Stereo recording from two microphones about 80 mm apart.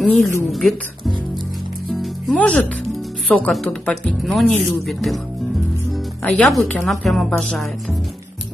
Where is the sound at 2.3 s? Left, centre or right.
Centre.